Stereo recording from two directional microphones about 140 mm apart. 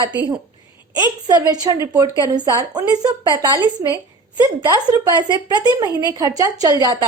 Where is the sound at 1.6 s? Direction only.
25° right (ahead or behind).